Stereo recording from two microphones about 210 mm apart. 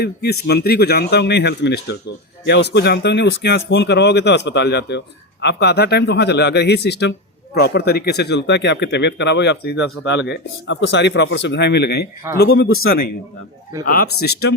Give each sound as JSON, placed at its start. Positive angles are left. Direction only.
{"t": 0.0, "sound": "speech", "side_deg": 50}
{"t": 12.6, "sound": "speech", "side_deg": 80}
{"t": 13.8, "sound": "speech", "side_deg": 45}